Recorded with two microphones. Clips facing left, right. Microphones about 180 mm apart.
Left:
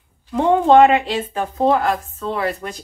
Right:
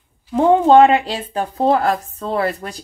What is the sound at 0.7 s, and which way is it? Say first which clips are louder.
Speech: left 1 dB; 35° right (ahead or behind).